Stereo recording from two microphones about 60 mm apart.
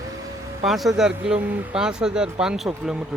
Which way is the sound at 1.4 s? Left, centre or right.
Right.